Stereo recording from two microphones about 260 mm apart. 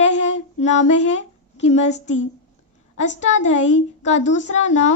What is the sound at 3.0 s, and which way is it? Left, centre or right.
A woman's voice, left.